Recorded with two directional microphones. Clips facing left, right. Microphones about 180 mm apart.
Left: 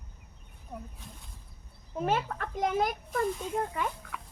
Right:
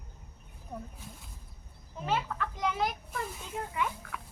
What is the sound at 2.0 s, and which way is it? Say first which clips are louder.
A child's voice: left 2 dB; 50° left (ahead or behind).